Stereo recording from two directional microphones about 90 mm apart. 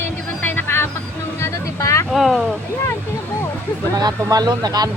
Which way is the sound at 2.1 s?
Centre (ahead or behind).